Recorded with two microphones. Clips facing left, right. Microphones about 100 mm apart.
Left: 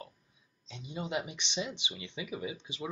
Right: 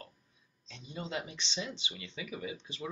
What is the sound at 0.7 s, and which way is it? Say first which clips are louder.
Speech: left 3 dB; 20° left (ahead or behind).